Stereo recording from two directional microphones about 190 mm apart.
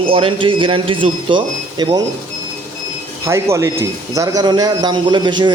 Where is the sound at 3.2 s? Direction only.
15° right (ahead or behind).